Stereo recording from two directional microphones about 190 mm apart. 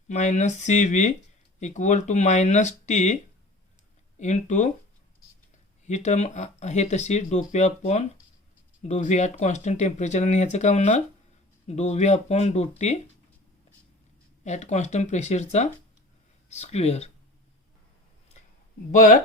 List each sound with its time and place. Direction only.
0.1 s speech: 40° left (ahead or behind)
4.2 s speech: 40° left (ahead or behind)
5.8 s speech: 40° left (ahead or behind)
14.4 s speech: 40° left (ahead or behind)
18.9 s speech: 45° left (ahead or behind)